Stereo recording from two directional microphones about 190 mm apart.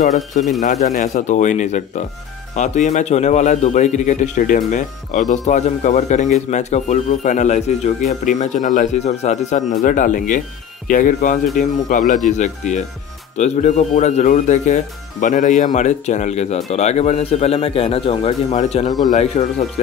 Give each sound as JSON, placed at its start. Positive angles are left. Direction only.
{"t": 0.1, "sound": "speech", "side_deg": 0}
{"t": 0.6, "sound": "speech", "side_deg": 40}